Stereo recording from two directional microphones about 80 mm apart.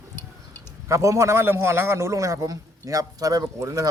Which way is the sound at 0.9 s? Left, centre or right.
Right.